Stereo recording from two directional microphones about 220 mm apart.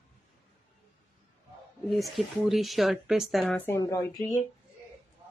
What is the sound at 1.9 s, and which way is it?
Speech, centre (ahead or behind).